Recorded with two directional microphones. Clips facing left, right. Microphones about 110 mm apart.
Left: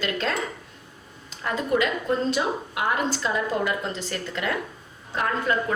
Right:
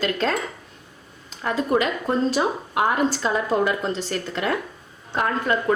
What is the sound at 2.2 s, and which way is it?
Dishes, 40° right (ahead or behind).